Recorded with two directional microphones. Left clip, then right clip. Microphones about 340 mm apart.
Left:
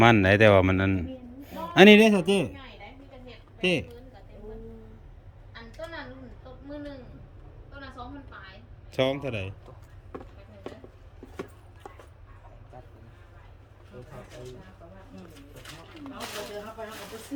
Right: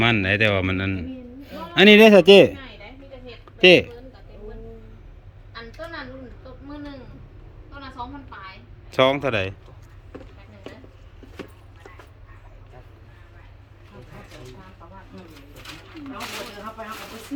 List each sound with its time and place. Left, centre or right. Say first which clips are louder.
0.0 s a man's voice: left 1 dB; centre
2.3 s a woman's voice: right 15 dB; right
3.6 s a man's voice: right 14 dB; centre
8.9 s a man's voice: right 8 dB; centre